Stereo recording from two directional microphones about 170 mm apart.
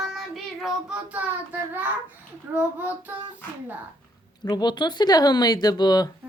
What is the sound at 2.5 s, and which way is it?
Speech, 10° right (ahead or behind).